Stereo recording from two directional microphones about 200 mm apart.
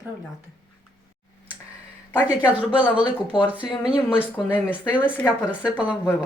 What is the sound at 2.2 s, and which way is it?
Speech, 5° right (ahead or behind).